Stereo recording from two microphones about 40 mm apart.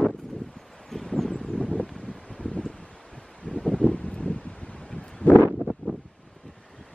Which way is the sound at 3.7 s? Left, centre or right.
Left.